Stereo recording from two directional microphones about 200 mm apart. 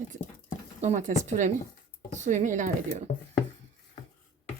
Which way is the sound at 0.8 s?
35° right (ahead or behind).